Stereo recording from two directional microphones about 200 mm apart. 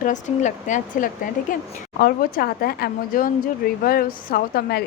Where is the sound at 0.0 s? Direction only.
40° left (ahead or behind).